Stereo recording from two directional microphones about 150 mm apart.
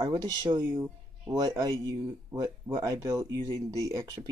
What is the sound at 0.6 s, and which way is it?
Speech, 15° right (ahead or behind).